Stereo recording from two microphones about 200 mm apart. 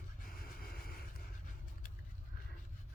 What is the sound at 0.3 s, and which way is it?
Vehicle, 45° left (ahead or behind).